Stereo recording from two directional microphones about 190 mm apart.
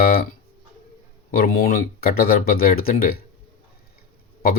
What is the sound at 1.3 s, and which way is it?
Speech, 50° left (ahead or behind).